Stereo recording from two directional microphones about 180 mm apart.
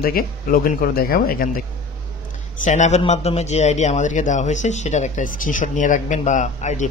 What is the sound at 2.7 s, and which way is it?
A man's voice, 40° left (ahead or behind).